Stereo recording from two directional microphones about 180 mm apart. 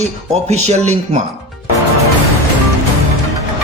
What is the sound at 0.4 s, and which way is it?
Speech, 40° right (ahead or behind).